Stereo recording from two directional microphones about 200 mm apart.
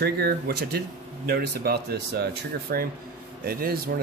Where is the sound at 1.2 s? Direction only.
50° right (ahead or behind).